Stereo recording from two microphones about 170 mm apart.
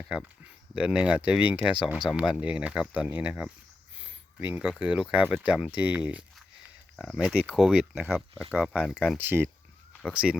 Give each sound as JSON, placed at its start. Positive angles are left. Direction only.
{"t": 0.8, "sound": "speech", "side_deg": -5}
{"t": 9.1, "sound": "speech", "side_deg": -15}